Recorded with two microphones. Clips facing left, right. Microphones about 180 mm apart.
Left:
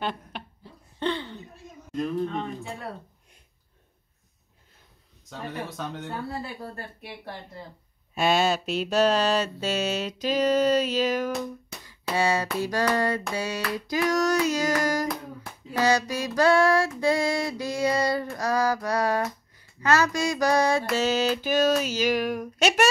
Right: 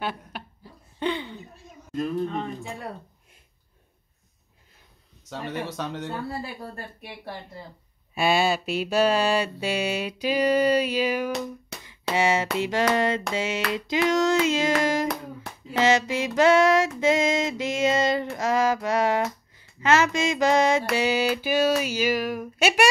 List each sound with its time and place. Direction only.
0.0 s a sound: 5° right (ahead or behind)
5.3 s speech: 75° right (ahead or behind)
8.1 s mantra: 10° right (ahead or behind)
12.2 s female singing: 20° right (ahead or behind)
20.9 s mantra: 15° right (ahead or behind)